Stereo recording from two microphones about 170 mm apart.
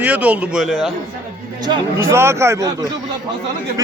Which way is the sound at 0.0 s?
10° right (ahead or behind).